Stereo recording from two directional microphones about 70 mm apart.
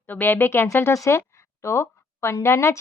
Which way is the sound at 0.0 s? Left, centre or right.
Left.